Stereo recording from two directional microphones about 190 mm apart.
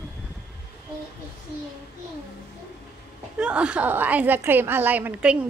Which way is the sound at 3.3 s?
5° right (ahead or behind).